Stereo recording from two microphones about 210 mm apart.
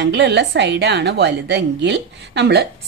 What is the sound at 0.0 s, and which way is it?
A woman's voice, 55° right (ahead or behind).